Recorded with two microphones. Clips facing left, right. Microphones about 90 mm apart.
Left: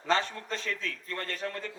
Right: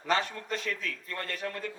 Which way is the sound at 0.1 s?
35° left (ahead or behind).